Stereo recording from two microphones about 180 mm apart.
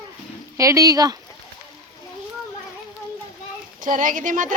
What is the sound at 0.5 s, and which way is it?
Speech, 20° right (ahead or behind).